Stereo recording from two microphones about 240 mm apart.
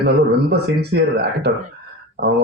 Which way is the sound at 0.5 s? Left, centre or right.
Right.